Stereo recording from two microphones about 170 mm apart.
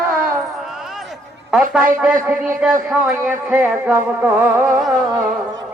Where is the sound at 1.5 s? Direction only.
5° right (ahead or behind).